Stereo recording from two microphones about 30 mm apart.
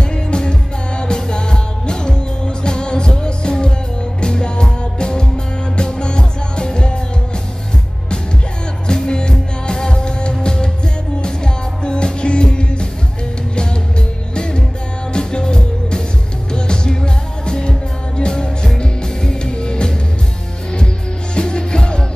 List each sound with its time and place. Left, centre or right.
0.1 s music: left
8.8 s music: left
14.3 s music: left
21.4 s music: left